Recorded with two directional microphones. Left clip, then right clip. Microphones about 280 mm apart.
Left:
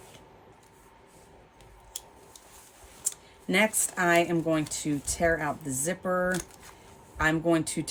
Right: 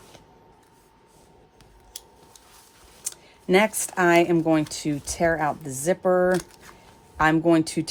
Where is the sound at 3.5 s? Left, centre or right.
Right.